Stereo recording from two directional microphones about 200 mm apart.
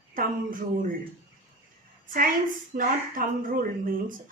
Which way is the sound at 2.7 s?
45° right (ahead or behind).